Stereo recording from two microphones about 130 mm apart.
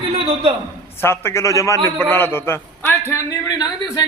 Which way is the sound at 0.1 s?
40° right (ahead or behind).